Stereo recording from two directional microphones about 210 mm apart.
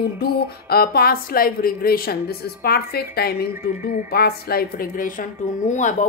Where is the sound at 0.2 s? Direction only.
45° left (ahead or behind).